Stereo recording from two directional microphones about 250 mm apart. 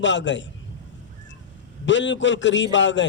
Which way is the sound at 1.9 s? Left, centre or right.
Left.